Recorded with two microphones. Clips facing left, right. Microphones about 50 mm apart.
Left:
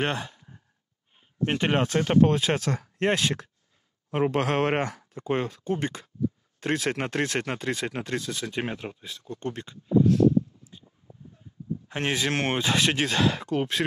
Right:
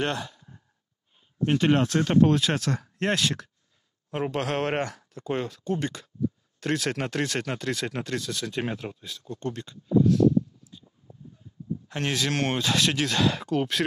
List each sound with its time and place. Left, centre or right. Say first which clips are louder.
0.0 s sigh: even; left
1.4 s speech: right 2 dB; left
10.6 s a sound: even; left
11.9 s speech: left 1 dB; left
13.2 s speech: even; centre